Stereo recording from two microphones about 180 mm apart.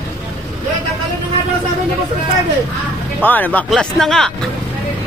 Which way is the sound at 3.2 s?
10° left (ahead or behind).